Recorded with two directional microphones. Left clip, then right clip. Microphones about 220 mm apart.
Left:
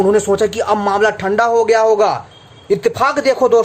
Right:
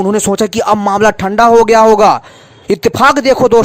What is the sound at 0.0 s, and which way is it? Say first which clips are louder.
Speech: even; 45° right (ahead or behind).